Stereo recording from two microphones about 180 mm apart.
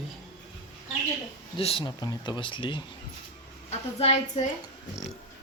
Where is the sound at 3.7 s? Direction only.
35° left (ahead or behind).